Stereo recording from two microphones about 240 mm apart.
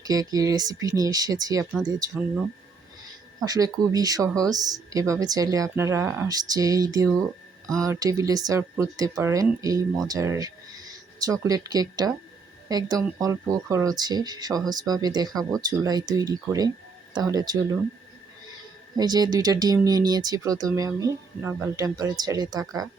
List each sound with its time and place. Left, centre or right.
0.0 s speech: centre
3.4 s speech: centre
18.9 s speech: centre